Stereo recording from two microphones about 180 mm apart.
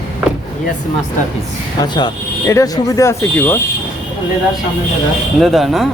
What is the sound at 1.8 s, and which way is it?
Speech, 25° left (ahead or behind).